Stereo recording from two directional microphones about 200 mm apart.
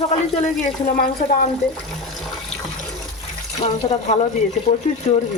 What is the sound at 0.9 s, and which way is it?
Speech, 45° left (ahead or behind).